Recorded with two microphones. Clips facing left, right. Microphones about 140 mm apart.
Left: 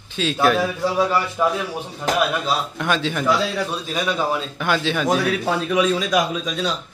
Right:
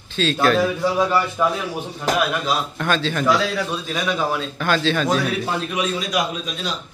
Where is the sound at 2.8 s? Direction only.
15° left (ahead or behind).